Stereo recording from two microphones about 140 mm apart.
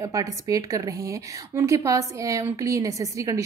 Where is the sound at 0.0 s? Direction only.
25° right (ahead or behind).